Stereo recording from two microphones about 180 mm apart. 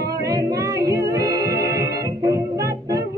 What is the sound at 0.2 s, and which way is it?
Music, 20° right (ahead or behind).